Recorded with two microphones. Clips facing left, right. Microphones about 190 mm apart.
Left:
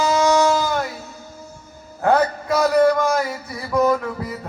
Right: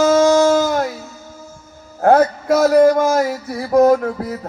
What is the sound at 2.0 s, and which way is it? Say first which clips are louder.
Music: right 5 dB; 40° right (ahead or behind).